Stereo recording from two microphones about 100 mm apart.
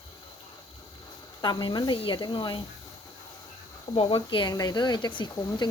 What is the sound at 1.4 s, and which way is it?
Speech, 50° left (ahead or behind).